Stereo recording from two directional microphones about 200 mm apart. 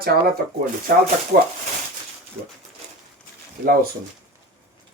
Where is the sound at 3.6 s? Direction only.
50° right (ahead or behind).